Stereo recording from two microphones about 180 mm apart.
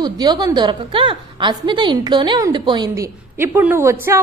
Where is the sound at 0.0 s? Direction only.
25° right (ahead or behind).